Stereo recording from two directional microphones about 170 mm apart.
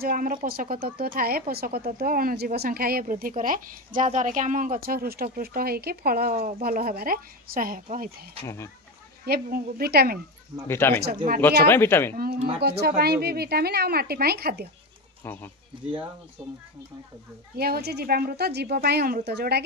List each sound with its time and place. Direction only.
0.0 s a woman's voice: 55° right (ahead or behind)
9.2 s a woman's voice: 65° right (ahead or behind)
10.7 s speech: 15° left (ahead or behind)
12.4 s speech: 35° right (ahead or behind)
12.6 s speech: 70° right (ahead or behind)
15.2 s speech: 10° left (ahead or behind)
16.4 s speech: 5° right (ahead or behind)
17.6 s speech: 65° right (ahead or behind)